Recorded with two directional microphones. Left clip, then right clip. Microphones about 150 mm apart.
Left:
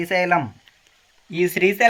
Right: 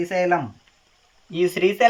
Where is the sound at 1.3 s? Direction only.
20° left (ahead or behind).